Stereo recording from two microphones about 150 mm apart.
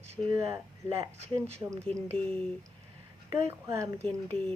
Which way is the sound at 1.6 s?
20° right (ahead or behind).